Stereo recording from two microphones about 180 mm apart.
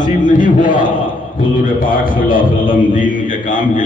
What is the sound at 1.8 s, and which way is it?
A man's voice, 50° left (ahead or behind).